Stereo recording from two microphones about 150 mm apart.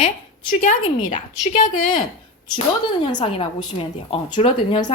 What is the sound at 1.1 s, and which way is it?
Speech, 55° left (ahead or behind).